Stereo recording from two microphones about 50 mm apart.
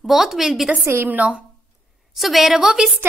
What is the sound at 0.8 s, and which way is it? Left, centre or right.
Speech, right.